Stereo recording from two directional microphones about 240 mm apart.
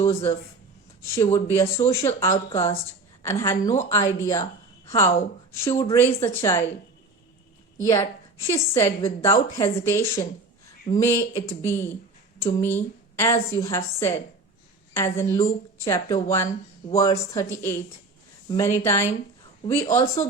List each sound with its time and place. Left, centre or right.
0.0 s a woman's voice: centre
5.6 s speech: left
5.9 s a woman's voice: centre
7.8 s a woman's voice: centre